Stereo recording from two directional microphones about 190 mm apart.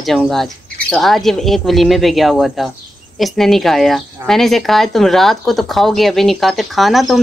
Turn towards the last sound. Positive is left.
turn(degrees=0)  # may be behind; listen again after turning